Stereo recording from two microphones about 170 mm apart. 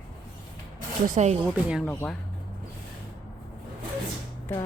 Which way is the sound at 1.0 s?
45° right (ahead or behind).